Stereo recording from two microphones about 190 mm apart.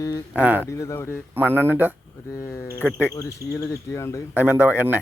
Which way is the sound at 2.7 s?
10° right (ahead or behind).